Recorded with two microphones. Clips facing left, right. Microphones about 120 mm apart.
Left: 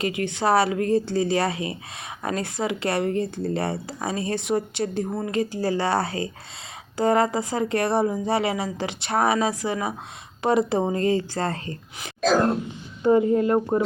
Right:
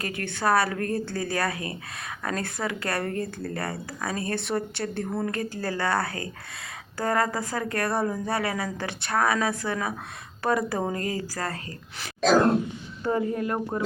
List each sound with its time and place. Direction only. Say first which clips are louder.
0.0 s speech: left 4 dB; 20° left (ahead or behind)
13.0 s speech: left 8 dB; 20° left (ahead or behind)